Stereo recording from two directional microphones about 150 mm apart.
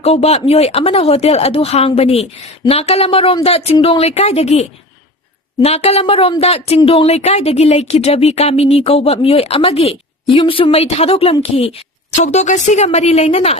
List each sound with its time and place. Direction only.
0.0 s a woman's voice: 45° left (ahead or behind)